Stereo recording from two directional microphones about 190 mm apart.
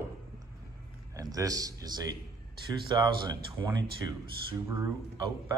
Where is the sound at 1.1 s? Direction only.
20° right (ahead or behind).